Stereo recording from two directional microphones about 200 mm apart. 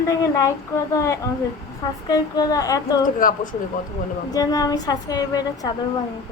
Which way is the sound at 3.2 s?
40° left (ahead or behind).